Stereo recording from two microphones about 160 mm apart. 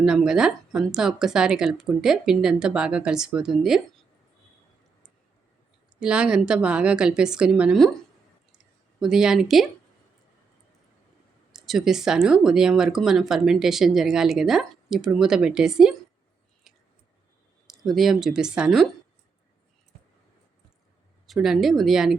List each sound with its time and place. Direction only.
0.0 s speech: 5° right (ahead or behind)
6.0 s speech: 5° right (ahead or behind)
8.5 s a sound: 5° right (ahead or behind)
11.5 s speech: centre (ahead or behind)
16.7 s a sound: centre (ahead or behind)
17.7 s speech: centre (ahead or behind)
21.2 s speech: centre (ahead or behind)